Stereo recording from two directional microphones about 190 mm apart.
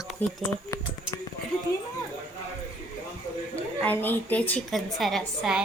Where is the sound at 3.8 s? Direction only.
10° left (ahead or behind).